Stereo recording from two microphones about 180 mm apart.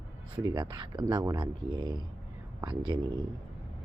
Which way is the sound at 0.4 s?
20° right (ahead or behind).